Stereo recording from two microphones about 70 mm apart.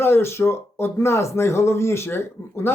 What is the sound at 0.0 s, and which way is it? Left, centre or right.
Speech, left.